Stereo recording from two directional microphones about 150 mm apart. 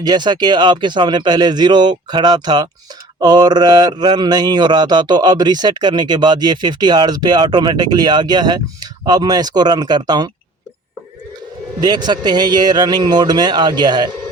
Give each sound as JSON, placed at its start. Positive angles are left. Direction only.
{"t": 0.0, "sound": "speech", "side_deg": -30}
{"t": 11.8, "sound": "speech", "side_deg": -30}